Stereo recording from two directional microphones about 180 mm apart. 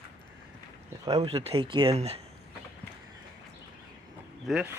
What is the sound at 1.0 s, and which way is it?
Speech, 25° right (ahead or behind).